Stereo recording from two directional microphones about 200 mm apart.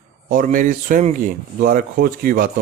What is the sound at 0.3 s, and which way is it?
Speech, 40° right (ahead or behind).